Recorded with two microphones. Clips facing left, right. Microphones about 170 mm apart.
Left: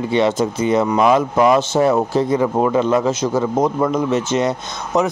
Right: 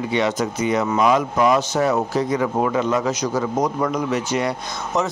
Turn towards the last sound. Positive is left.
turn(degrees=20)  # may be behind; listen again after turning